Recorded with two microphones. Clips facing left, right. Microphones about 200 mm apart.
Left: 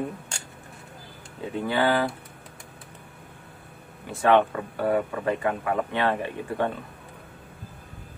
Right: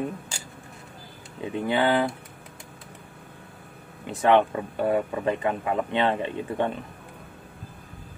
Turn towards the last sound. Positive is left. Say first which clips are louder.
# right 1 dB
turn(degrees=-20)  # may be behind; listen again after turning